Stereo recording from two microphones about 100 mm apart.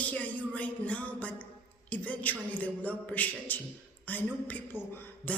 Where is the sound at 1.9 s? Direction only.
15° left (ahead or behind).